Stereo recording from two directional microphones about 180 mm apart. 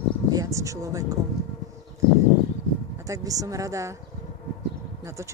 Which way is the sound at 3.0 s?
20° right (ahead or behind).